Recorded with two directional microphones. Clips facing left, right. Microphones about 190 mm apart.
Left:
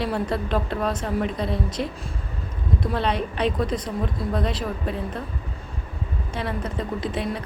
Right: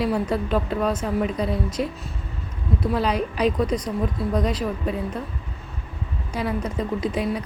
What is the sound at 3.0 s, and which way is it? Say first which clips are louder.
Speech: right 2 dB; 30° left (ahead or behind).